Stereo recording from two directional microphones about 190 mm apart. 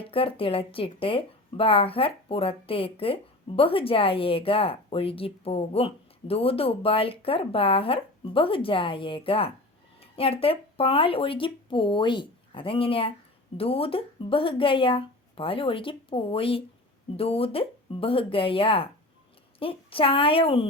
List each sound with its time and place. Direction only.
0.0 s speech: 30° left (ahead or behind)